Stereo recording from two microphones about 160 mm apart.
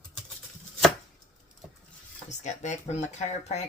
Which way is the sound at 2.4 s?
45° left (ahead or behind).